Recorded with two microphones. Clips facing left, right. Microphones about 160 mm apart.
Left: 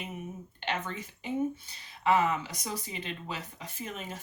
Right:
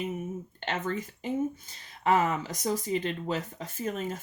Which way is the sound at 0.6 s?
45° right (ahead or behind).